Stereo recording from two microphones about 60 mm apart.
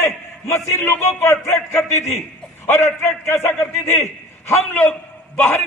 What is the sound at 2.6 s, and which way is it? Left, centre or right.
A man's voice, left.